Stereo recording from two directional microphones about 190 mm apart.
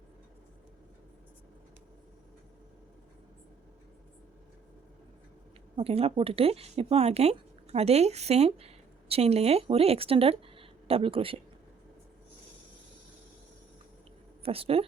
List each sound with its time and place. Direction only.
5.7 s speech: 30° right (ahead or behind)
14.4 s speech: 30° right (ahead or behind)